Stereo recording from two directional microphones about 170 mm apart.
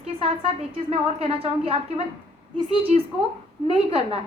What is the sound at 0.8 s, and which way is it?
Speech, 35° right (ahead or behind).